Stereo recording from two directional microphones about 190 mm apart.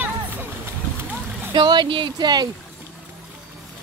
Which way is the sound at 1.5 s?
25° right (ahead or behind).